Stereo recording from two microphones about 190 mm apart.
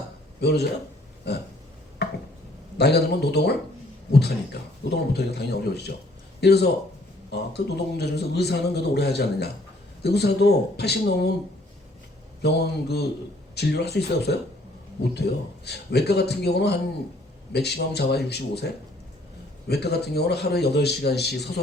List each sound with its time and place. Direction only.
0.3 s a man's voice: 60° left (ahead or behind)
2.0 s chopping: 60° left (ahead or behind)
2.7 s a man's voice: 60° left (ahead or behind)
12.4 s a man's voice: 60° left (ahead or behind)
15.6 s a man's voice: 60° left (ahead or behind)